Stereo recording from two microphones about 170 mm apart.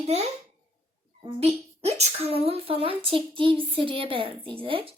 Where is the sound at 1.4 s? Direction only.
35° right (ahead or behind).